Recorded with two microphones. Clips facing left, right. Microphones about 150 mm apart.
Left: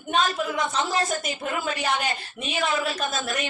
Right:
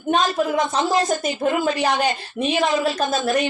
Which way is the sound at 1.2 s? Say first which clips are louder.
Right 8 dB; 35° right (ahead or behind).